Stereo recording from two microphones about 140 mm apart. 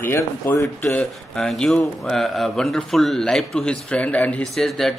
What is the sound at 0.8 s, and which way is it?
Speech, 5° left (ahead or behind).